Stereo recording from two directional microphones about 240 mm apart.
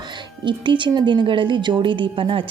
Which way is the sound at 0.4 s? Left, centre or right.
Centre.